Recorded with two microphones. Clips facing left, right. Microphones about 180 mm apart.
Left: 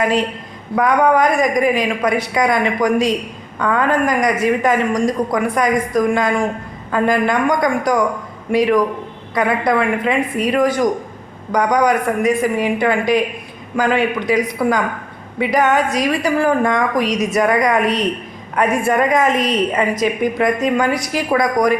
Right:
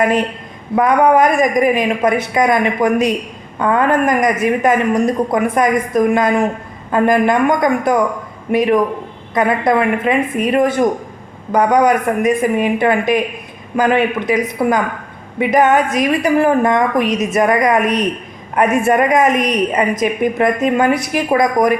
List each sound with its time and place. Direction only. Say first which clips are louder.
0.8 s a woman's voice: right 2 dB; 20° right (ahead or behind)